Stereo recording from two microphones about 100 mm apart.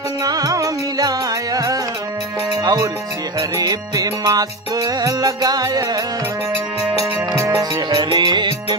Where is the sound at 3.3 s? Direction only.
35° right (ahead or behind).